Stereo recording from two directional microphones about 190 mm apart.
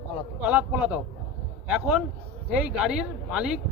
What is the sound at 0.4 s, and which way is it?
A man's voice, 10° right (ahead or behind).